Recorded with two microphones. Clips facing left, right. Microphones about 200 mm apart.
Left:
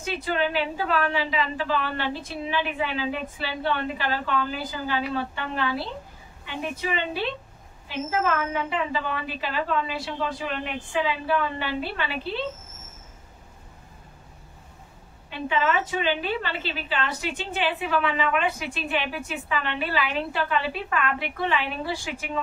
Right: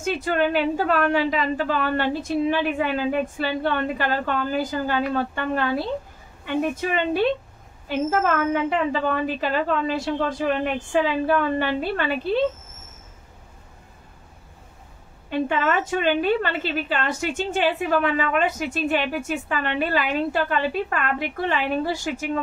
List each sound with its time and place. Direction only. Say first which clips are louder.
0.0 s a woman's voice: right 4 dB; 50° right (ahead or behind)
15.2 s a woman's voice: right 3 dB; 50° right (ahead or behind)